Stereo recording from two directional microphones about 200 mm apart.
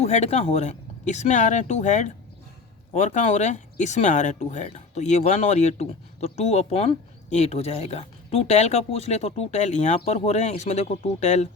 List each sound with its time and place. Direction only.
0.0 s speech: 35° left (ahead or behind)